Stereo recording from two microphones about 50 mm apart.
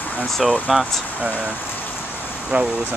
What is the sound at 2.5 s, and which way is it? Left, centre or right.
Speech, right.